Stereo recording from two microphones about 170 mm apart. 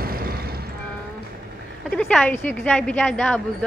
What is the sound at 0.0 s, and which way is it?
Vehicle, 60° right (ahead or behind).